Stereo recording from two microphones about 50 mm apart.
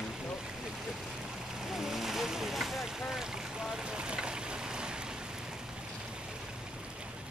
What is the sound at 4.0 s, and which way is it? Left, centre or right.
Boat, centre.